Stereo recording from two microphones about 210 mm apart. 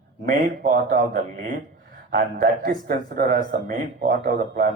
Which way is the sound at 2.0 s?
50° right (ahead or behind).